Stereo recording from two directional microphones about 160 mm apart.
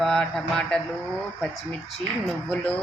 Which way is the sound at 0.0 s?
5° left (ahead or behind).